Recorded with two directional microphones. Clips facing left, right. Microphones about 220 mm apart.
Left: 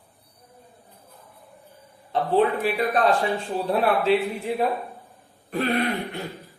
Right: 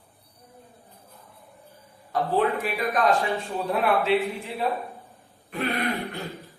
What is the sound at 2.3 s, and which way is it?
Speech, 30° left (ahead or behind).